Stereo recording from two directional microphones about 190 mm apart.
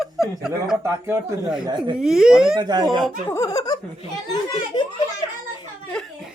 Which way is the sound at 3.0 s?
15° left (ahead or behind).